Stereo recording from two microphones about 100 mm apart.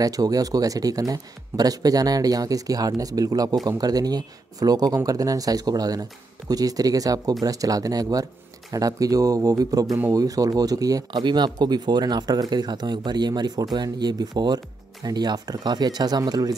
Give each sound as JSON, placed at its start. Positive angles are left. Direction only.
{"t": 0.0, "sound": "speech", "side_deg": -40}